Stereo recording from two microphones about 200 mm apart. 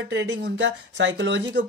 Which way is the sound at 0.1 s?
65° right (ahead or behind).